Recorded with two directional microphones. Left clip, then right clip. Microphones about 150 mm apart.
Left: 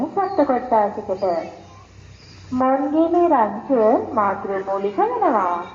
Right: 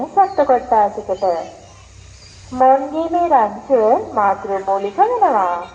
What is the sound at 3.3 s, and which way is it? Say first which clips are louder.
A woman's voice: right 4 dB; 35° right (ahead or behind).